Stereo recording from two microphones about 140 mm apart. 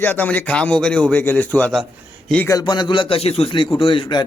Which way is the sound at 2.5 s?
30° left (ahead or behind).